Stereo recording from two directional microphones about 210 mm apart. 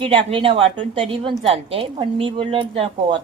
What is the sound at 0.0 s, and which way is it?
A woman's voice, 25° right (ahead or behind).